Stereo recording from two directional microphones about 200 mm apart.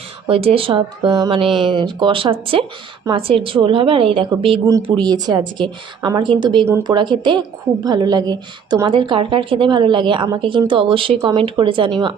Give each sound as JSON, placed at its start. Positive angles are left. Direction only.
{"t": 0.3, "sound": "a woman's voice", "side_deg": -30}